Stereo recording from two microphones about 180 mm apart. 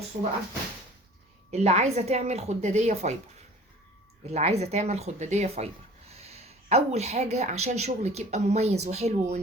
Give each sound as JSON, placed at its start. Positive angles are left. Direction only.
{"t": 1.5, "sound": "speech", "side_deg": -40}
{"t": 4.3, "sound": "speech", "side_deg": -35}